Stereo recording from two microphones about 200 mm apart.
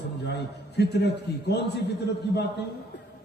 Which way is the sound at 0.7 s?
55° left (ahead or behind).